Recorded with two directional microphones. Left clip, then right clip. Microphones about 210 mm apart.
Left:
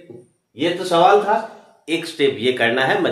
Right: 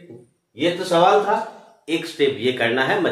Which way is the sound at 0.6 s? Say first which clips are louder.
Left 1 dB; 30° left (ahead or behind).